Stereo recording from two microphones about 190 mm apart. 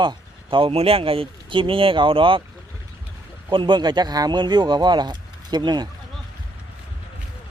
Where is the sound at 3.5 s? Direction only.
25° right (ahead or behind).